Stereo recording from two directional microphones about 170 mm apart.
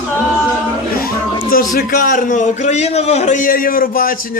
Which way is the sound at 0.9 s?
60° left (ahead or behind).